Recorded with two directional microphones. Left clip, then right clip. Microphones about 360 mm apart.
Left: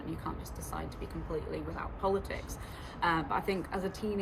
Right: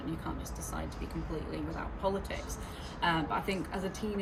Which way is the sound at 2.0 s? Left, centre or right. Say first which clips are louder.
Left 2 dB; centre.